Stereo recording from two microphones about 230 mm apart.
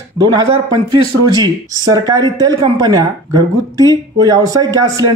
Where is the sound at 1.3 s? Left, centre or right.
Centre.